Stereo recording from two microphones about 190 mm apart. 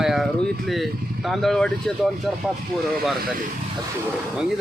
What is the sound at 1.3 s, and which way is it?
Speech, centre (ahead or behind).